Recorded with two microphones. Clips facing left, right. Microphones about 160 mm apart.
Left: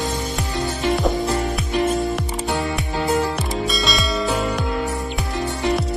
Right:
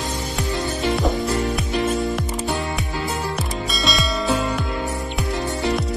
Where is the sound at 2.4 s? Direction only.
80° left.